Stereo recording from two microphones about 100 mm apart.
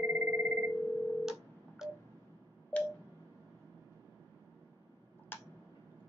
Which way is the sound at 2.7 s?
15° left (ahead or behind).